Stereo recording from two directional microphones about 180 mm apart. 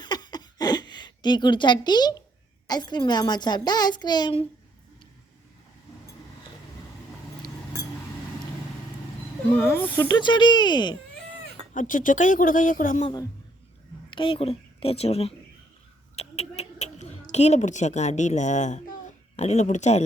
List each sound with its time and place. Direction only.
0.0 s a sound: 25° left (ahead or behind)
2.6 s a child's voice: 25° left (ahead or behind)
9.6 s speech: 10° left (ahead or behind)
10.1 s a child's voice: 25° left (ahead or behind)
11.7 s speech: 45° left (ahead or behind)
14.1 s a woman's voice: 30° left (ahead or behind)
16.1 s a sound: 35° left (ahead or behind)
17.3 s a woman's voice: 40° left (ahead or behind)